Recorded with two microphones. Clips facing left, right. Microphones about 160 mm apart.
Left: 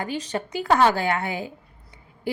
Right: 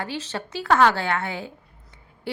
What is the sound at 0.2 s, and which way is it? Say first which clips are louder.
A woman's voice: left 3 dB; 10° left (ahead or behind).